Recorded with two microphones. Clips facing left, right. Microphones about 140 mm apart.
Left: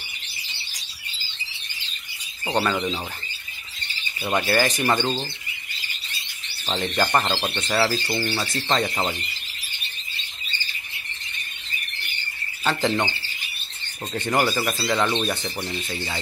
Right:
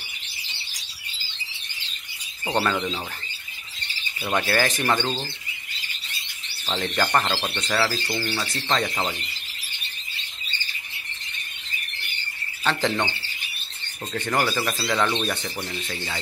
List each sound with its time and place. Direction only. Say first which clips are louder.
2.5 s speech: left 1 dB; centre (ahead or behind)
4.2 s speech: left 2 dB; 5° left (ahead or behind)
6.8 s speech: left 1 dB; 5° left (ahead or behind)
7.2 s speech: left 1 dB; 15° left (ahead or behind)
8.6 s speech: left 1 dB; 10° left (ahead or behind)
12.6 s speech: left 1 dB; 10° left (ahead or behind)
14.1 s speech: left 2 dB; 15° left (ahead or behind)